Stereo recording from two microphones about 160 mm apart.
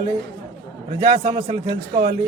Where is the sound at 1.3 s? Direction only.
40° right (ahead or behind).